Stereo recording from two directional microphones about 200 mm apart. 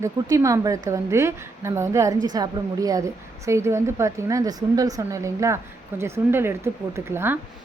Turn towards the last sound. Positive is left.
turn(degrees=-10)  # may be behind; listen again after turning